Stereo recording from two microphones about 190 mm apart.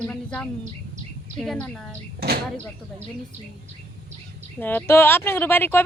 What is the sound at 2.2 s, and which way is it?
Speech, 55° right (ahead or behind).